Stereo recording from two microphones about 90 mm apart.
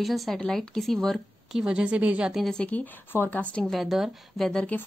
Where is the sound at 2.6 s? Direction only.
15° left (ahead or behind).